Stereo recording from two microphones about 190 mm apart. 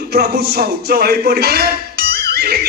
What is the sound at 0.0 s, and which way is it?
Speech, 55° right (ahead or behind).